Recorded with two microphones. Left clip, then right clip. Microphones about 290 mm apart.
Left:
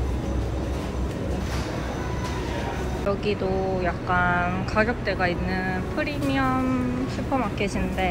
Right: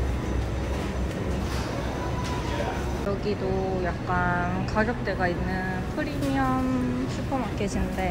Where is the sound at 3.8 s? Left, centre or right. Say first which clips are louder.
Left 4 dB; centre.